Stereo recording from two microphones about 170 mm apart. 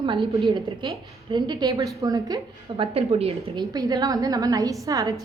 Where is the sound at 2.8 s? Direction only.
35° right (ahead or behind).